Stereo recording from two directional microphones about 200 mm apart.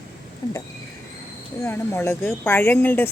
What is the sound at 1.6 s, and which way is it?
Speech, 10° left (ahead or behind).